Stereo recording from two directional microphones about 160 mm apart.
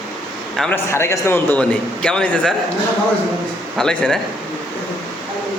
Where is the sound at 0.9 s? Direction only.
15° left (ahead or behind).